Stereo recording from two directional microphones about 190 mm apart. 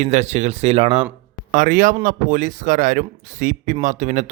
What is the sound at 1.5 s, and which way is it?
Speech, 45° right (ahead or behind).